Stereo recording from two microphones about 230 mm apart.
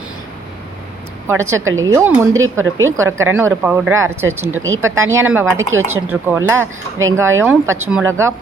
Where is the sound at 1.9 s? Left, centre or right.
Centre.